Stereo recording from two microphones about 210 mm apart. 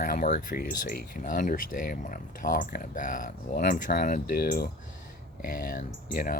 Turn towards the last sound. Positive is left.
turn(degrees=45)  # may be behind; listen again after turning